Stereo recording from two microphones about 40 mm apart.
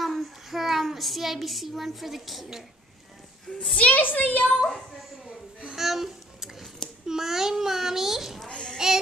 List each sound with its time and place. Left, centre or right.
0.0 s child singing: centre
3.5 s a child's voice: centre
3.9 s a woman's voice: left
4.6 s a woman's voice: centre
5.7 s a sound: centre
7.1 s a child's voice: centre
8.5 s a child's voice: left
8.7 s music: centre